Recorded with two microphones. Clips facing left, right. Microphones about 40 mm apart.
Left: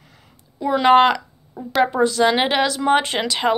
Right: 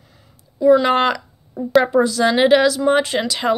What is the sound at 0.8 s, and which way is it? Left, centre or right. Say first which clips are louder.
Speech: left 4 dB; left.